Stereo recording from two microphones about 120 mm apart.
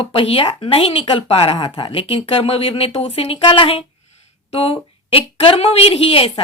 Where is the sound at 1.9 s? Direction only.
50° left (ahead or behind).